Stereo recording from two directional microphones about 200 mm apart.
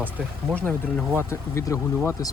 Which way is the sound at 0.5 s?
5° left (ahead or behind).